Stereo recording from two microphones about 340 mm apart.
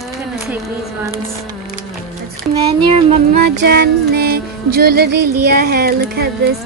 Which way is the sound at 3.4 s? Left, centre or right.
Right.